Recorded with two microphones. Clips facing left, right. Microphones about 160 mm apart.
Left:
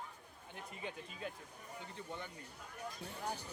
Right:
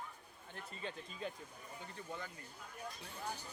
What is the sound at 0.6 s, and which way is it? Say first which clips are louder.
Speech: even; 15° left (ahead or behind).